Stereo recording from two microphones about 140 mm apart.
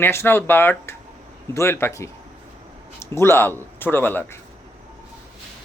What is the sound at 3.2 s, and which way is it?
Speech, 15° left (ahead or behind).